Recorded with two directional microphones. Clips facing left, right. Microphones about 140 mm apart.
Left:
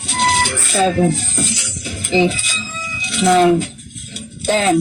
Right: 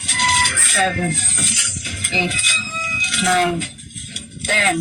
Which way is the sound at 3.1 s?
35° left (ahead or behind).